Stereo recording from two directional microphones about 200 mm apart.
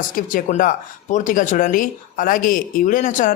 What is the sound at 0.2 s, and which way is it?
Speech, 40° left (ahead or behind).